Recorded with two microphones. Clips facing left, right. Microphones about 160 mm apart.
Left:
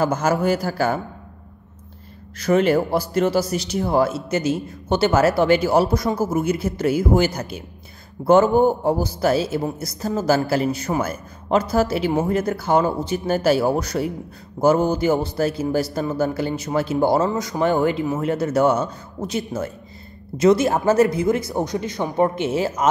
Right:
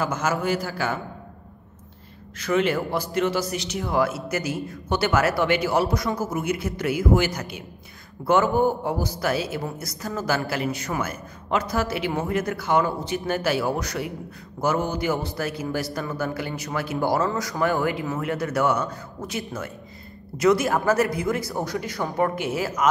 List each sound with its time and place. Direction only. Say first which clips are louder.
0.0 s a man's voice: left 5 dB; 35° left (ahead or behind)
2.4 s a man's voice: left 5 dB; 40° left (ahead or behind); by 22.8 s 25° left (ahead or behind)